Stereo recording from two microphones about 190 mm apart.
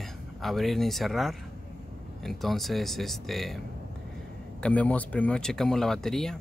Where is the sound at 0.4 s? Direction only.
Centre (ahead or behind).